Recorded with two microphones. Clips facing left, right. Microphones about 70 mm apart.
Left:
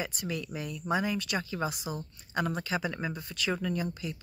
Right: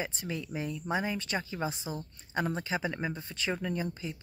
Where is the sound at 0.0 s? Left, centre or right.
Right.